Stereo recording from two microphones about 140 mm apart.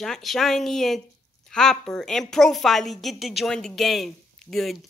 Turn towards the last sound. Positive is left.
turn(degrees=0)  # may be behind; listen again after turning